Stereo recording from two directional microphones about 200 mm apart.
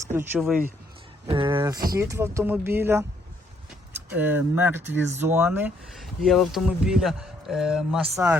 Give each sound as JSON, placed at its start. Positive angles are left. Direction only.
{"t": 0.1, "sound": "speech", "side_deg": -10}
{"t": 1.3, "sound": "speech", "side_deg": -25}
{"t": 1.7, "sound": "speech", "side_deg": -50}
{"t": 2.0, "sound": "speech", "side_deg": -15}
{"t": 4.1, "sound": "speech", "side_deg": -10}